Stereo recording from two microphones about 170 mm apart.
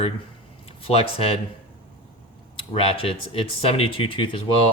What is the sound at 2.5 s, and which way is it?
Speech, 30° left (ahead or behind).